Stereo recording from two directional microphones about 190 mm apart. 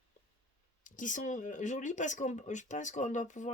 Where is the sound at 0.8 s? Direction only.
45° left (ahead or behind).